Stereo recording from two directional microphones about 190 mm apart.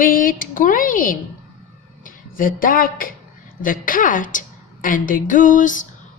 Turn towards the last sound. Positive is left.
turn(degrees=45)  # may be behind; listen again after turning